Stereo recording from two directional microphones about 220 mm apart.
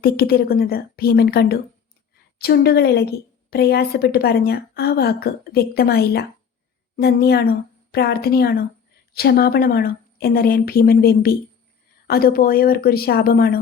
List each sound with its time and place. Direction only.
0.0 s a woman's voice: 45° left (ahead or behind)